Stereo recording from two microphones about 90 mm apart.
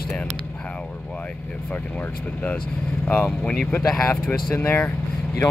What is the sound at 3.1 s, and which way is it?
Speech, 15° left (ahead or behind).